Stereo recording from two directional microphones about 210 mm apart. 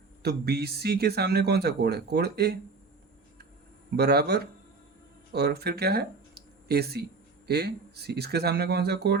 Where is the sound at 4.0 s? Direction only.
50° right (ahead or behind).